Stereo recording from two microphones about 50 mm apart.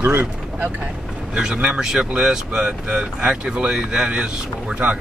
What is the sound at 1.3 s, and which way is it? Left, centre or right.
Speech, centre.